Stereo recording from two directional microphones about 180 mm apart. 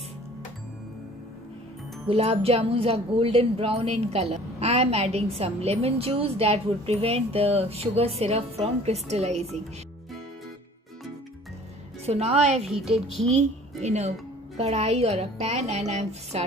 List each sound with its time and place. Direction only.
2.0 s speech: 35° right (ahead or behind)
12.1 s speech: 35° right (ahead or behind)